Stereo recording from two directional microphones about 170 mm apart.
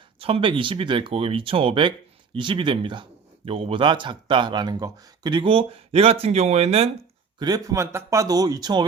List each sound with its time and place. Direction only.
0.2 s a man's voice: 35° right (ahead or behind)
7.3 s a man's voice: 25° right (ahead or behind)